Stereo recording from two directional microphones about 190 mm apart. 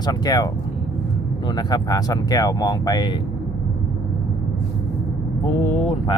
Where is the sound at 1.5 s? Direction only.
20° left (ahead or behind).